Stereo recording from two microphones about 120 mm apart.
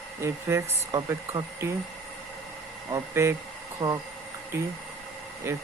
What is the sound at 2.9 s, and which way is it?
Speech, 25° right (ahead or behind).